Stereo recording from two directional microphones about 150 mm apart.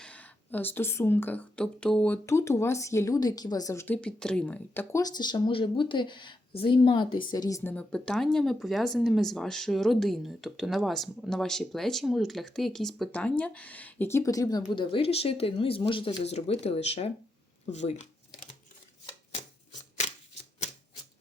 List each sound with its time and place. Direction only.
0.0 s speech: 10° left (ahead or behind)
2.2 s speech: 20° left (ahead or behind)
14.7 s speech: 35° left (ahead or behind); by 18.0 s 50° left (ahead or behind)